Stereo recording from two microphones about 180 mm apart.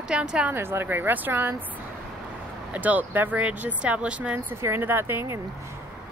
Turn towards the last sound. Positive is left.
turn(degrees=-15)  # may be behind; listen again after turning